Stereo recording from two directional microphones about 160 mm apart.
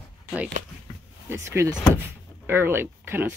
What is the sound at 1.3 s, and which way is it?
Speech, 15° right (ahead or behind).